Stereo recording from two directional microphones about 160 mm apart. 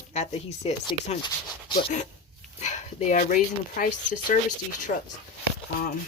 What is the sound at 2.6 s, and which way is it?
Speech, 50° left (ahead or behind).